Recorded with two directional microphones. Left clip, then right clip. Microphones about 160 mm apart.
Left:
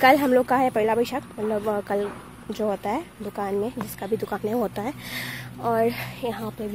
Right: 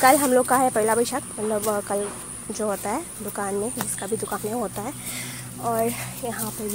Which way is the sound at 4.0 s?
30° left (ahead or behind).